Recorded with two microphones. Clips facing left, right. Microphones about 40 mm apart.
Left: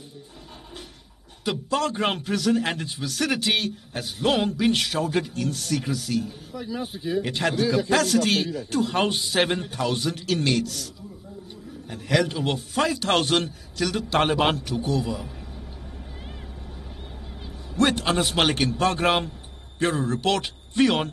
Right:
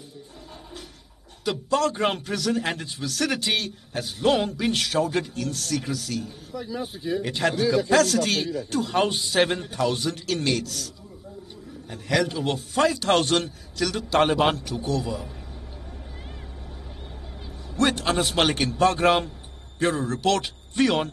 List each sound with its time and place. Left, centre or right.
1.4 s a man's voice: centre
11.9 s a man's voice: centre
17.7 s a man's voice: centre